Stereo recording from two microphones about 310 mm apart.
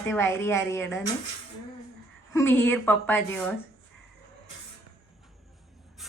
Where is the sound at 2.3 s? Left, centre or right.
Centre.